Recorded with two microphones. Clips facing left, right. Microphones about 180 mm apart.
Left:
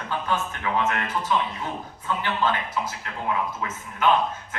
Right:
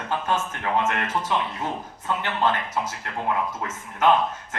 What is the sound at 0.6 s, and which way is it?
A man's voice, 50° right (ahead or behind).